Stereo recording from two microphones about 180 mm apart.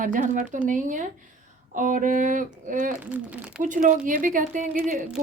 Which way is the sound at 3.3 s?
5° right (ahead or behind).